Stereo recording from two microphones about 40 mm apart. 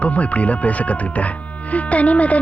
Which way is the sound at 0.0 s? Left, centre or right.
Left.